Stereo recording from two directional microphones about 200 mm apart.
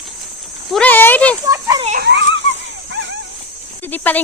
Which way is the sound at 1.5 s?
15° right (ahead or behind).